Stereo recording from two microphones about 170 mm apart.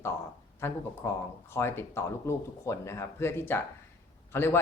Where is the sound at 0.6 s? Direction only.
15° left (ahead or behind).